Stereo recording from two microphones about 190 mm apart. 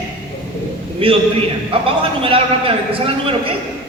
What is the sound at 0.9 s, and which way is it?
A man's voice, 30° right (ahead or behind).